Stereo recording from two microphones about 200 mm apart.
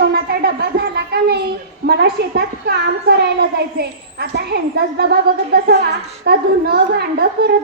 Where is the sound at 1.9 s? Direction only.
55° right (ahead or behind).